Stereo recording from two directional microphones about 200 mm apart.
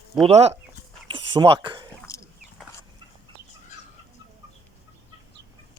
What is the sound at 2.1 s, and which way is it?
Wild animals, 15° left (ahead or behind).